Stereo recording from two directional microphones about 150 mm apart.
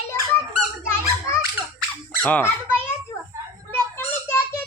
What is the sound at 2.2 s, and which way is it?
Speech, 10° left (ahead or behind).